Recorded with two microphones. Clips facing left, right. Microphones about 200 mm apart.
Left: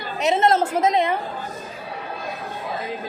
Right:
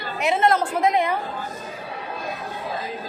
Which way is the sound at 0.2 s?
25° left (ahead or behind).